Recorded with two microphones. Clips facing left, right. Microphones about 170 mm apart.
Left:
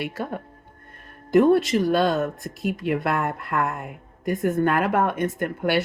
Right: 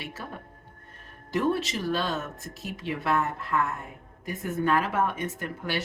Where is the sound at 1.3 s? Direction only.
60° left (ahead or behind).